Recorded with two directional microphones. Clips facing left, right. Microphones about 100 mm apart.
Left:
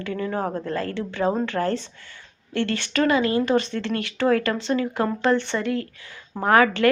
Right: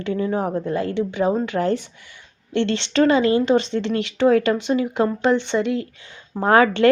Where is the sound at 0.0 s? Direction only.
20° right (ahead or behind).